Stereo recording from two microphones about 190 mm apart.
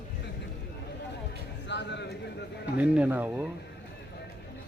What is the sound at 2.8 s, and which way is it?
Speech, 10° right (ahead or behind).